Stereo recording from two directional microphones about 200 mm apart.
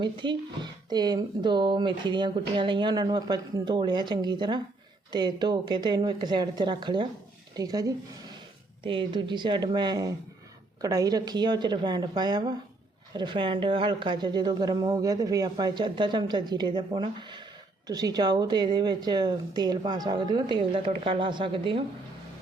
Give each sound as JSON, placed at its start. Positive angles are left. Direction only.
{"t": 0.0, "sound": "speech", "side_deg": -25}